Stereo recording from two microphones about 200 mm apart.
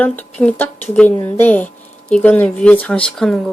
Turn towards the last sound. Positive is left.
turn(degrees=0)  # may be behind; listen again after turning